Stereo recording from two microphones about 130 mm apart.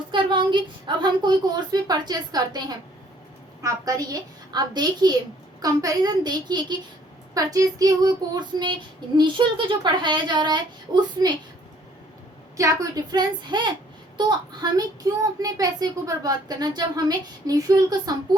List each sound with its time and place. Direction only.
0.1 s a woman's voice: 35° right (ahead or behind)
12.5 s a woman's voice: 25° right (ahead or behind)